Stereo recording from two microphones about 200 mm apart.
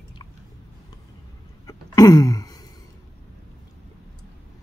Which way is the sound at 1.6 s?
15° left (ahead or behind).